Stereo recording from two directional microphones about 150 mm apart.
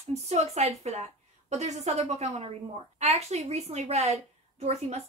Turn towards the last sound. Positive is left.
turn(degrees=-45)  # may be behind; listen again after turning